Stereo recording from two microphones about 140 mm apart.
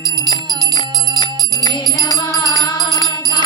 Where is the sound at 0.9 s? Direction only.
25° right (ahead or behind).